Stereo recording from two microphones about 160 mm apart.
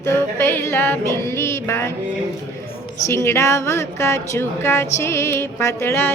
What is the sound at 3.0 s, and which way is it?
A woman's voice, 15° left (ahead or behind).